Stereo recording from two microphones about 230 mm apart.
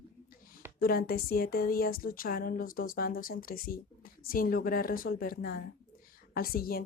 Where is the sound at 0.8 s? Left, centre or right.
Left.